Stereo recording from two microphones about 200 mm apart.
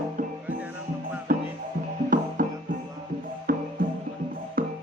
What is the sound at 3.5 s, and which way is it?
Music, 45° right (ahead or behind).